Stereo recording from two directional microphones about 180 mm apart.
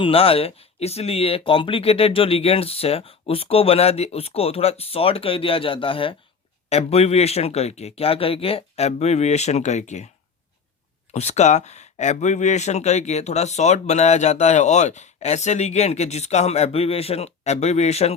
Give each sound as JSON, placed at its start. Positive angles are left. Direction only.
{"t": 0.0, "sound": "speech", "side_deg": 30}
{"t": 11.1, "sound": "speech", "side_deg": 40}